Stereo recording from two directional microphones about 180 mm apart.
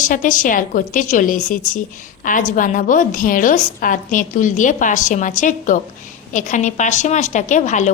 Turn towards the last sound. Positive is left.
turn(degrees=45)  # may be behind; listen again after turning